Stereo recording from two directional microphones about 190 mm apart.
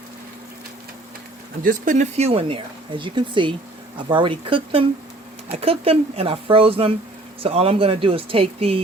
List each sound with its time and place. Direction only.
1.6 s speech: 40° right (ahead or behind)